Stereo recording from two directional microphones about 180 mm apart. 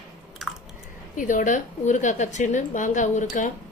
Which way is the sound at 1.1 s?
45° left (ahead or behind).